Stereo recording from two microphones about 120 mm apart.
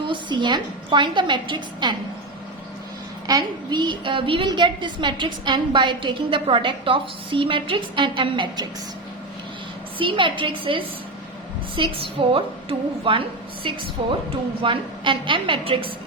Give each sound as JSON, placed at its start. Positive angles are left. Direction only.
{"t": 0.1, "sound": "a woman's voice", "side_deg": -40}
{"t": 3.2, "sound": "a woman's voice", "side_deg": -35}
{"t": 10.0, "sound": "a woman's voice", "side_deg": -45}